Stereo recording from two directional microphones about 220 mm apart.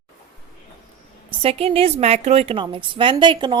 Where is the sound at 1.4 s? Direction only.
25° right (ahead or behind).